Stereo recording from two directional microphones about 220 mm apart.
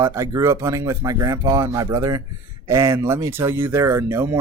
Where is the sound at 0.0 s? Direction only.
15° right (ahead or behind).